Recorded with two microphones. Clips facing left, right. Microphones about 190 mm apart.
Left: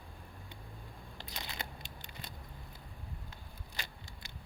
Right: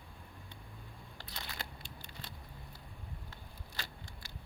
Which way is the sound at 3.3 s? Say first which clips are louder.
Even; 20° left (ahead or behind).